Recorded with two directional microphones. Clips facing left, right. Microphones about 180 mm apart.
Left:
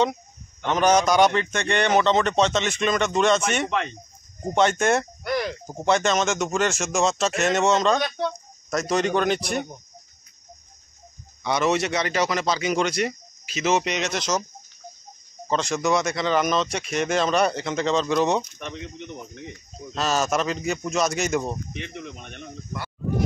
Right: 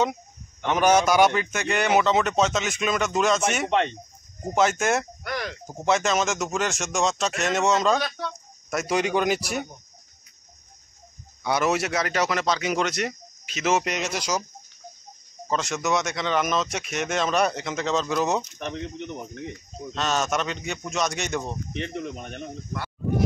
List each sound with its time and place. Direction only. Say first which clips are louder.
0.0 s a man's voice: left 2 dB; 10° right (ahead or behind)
11.4 s speech: left 1 dB; 5° right (ahead or behind)
15.5 s speech: left 3 dB; 5° right (ahead or behind)
18.7 s speech: right 3 dB; 50° right (ahead or behind)
19.9 s speech: left 2 dB; 5° left (ahead or behind)
21.7 s speech: right 4 dB; 40° right (ahead or behind)